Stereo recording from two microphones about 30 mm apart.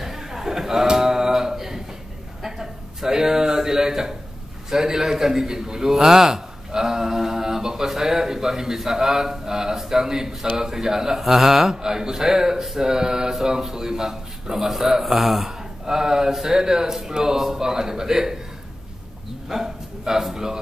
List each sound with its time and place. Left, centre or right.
0.0 s a sound: centre
4.6 s a man's voice: centre
11.7 s a man's voice: centre
15.9 s a man's voice: right
19.5 s a man's voice: centre